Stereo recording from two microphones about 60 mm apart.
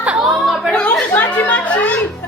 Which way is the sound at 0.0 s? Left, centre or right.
Right.